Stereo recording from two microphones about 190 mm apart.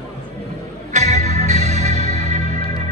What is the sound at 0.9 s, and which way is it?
Music, 35° right (ahead or behind).